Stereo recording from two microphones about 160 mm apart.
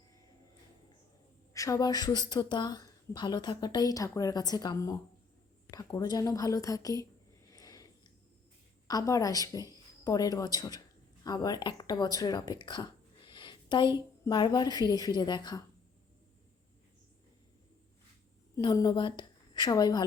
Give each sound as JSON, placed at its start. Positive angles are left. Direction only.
{"t": 1.5, "sound": "a woman's voice", "side_deg": 20}
{"t": 7.5, "sound": "a sound", "side_deg": 20}
{"t": 8.9, "sound": "a woman's voice", "side_deg": 20}
{"t": 18.5, "sound": "a woman's voice", "side_deg": 25}